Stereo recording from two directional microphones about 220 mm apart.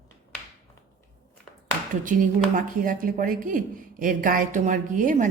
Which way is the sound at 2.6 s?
40° right (ahead or behind).